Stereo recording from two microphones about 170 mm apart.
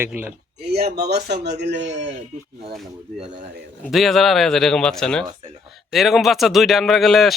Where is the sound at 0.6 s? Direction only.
70° right (ahead or behind); by 2.1 s 90° right.